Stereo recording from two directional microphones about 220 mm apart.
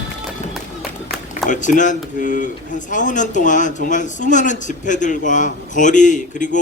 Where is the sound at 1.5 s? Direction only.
35° left (ahead or behind).